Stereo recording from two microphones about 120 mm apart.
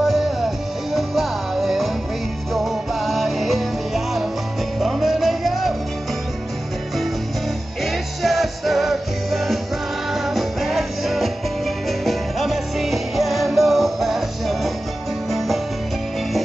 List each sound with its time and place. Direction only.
0.0 s music: centre (ahead or behind)
7.8 s music: centre (ahead or behind)